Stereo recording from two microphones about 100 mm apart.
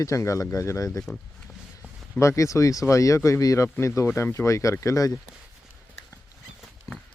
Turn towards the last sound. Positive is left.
turn(degrees=35)  # may be behind; listen again after turning